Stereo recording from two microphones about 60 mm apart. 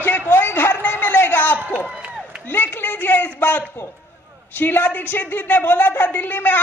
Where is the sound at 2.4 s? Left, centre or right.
Left.